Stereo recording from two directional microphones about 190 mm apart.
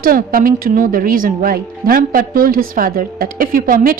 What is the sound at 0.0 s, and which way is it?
Speech, 50° right (ahead or behind).